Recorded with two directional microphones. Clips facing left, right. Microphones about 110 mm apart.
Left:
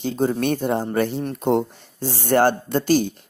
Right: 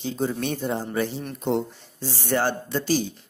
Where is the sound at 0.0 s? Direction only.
50° left (ahead or behind).